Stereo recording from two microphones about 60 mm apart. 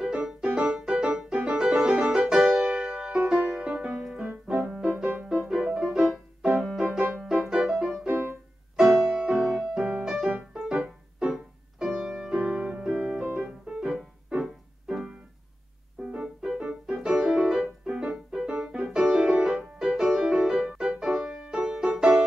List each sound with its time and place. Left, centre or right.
0.0 s music: centre
4.6 s music: centre
6.6 s music: centre
7.2 s music: centre
8.1 s music: right
8.7 s music: centre
12.4 s piano: centre
16.0 s music: centre